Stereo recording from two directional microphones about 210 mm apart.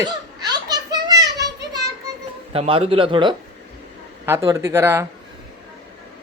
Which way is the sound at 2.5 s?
25° right (ahead or behind).